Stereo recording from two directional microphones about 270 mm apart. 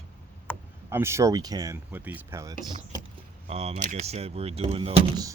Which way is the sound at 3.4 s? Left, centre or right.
Right.